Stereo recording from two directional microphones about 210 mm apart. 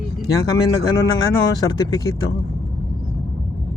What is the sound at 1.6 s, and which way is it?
Speech, 20° left (ahead or behind).